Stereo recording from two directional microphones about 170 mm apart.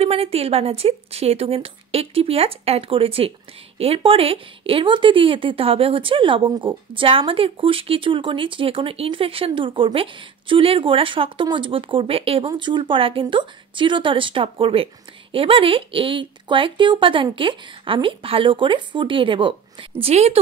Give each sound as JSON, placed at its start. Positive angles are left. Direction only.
{"t": 0.0, "sound": "speech", "side_deg": -35}